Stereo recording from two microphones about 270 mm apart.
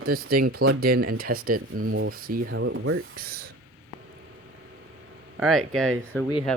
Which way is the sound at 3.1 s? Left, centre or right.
Right.